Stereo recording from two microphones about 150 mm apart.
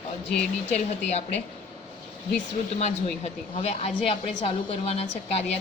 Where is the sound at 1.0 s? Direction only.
45° left (ahead or behind).